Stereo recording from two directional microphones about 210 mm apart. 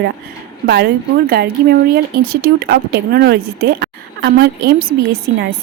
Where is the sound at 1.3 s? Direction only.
50° right (ahead or behind).